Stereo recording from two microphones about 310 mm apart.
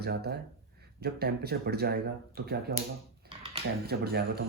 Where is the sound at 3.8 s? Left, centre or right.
Right.